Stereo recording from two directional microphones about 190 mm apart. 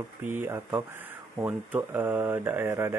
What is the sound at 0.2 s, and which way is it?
A man's voice, 10° right (ahead or behind).